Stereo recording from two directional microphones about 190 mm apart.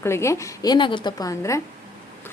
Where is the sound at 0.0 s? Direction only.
15° left (ahead or behind).